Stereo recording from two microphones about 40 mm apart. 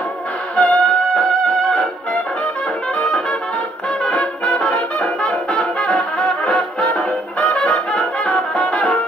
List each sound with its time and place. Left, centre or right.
0.6 s music: left
3.0 s brass instrument: left
4.0 s music: left
4.5 s music: left
4.7 s brass instrument: left
5.8 s music: left